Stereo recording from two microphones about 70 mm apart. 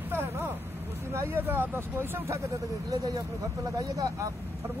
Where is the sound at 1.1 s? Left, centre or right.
Right.